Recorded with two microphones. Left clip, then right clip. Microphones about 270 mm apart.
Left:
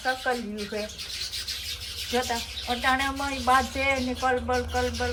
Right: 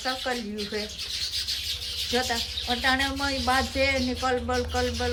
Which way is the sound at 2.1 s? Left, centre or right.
Centre.